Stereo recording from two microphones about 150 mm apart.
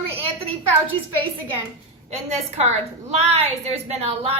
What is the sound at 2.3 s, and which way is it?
A woman's voice, 45° right (ahead or behind).